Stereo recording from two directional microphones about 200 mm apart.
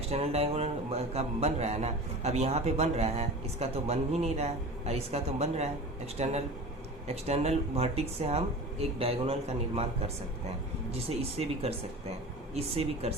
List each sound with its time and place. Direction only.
0.1 s a man's voice: 30° right (ahead or behind)
11.1 s a man's voice: 30° right (ahead or behind)